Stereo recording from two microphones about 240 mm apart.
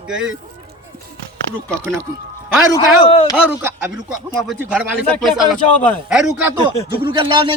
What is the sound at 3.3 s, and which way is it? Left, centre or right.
Speech, centre.